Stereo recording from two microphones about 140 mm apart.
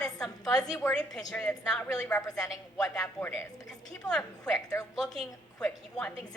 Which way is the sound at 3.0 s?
20° left (ahead or behind).